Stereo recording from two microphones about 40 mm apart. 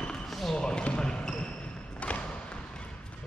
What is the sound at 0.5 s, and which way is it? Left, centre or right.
Basketball bounce, left.